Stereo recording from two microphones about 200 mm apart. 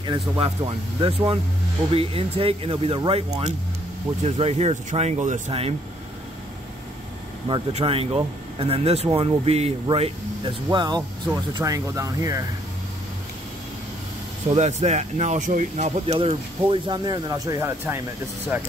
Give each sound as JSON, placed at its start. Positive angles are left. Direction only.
{"t": 0.4, "sound": "speech", "side_deg": -30}
{"t": 7.4, "sound": "speech", "side_deg": -25}
{"t": 14.5, "sound": "speech", "side_deg": -35}